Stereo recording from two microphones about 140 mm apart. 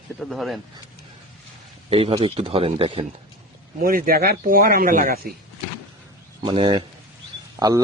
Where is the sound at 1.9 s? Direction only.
40° right (ahead or behind).